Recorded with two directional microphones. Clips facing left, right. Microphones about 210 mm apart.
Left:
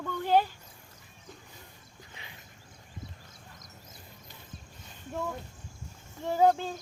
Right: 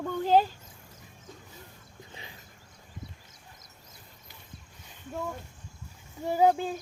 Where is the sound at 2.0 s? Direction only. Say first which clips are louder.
Right 4 dB; 30° right (ahead or behind).